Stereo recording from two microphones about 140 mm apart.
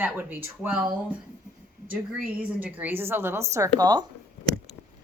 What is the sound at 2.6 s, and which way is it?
Speech, 10° right (ahead or behind).